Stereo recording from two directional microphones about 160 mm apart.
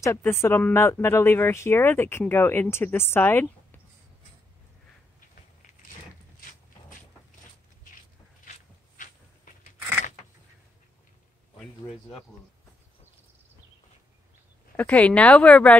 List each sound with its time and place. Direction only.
0.0 s speech: 15° left (ahead or behind)
8.5 s a sound: 55° left (ahead or behind)
9.8 s creak: 15° right (ahead or behind)
14.8 s speech: 10° left (ahead or behind)